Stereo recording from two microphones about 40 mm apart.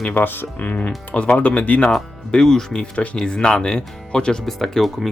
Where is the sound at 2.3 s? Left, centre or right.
Centre.